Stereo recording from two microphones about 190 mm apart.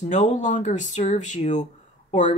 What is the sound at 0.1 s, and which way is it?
Speech, 40° left (ahead or behind).